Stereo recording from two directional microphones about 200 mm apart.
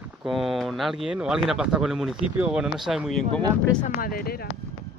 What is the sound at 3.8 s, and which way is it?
Speech, 45° left (ahead or behind).